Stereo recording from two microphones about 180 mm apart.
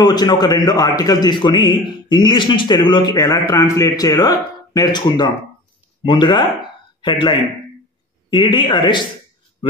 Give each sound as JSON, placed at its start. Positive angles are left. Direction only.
{"t": 0.0, "sound": "speech", "side_deg": 20}